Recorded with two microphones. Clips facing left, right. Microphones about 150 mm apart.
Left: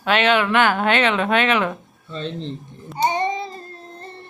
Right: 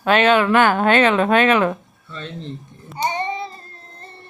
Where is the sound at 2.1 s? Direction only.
25° left (ahead or behind).